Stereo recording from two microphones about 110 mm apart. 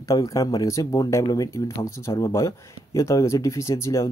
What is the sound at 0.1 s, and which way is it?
Speech, 30° left (ahead or behind).